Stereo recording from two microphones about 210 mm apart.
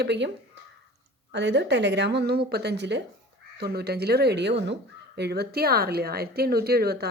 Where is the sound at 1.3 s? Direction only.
55° right (ahead or behind).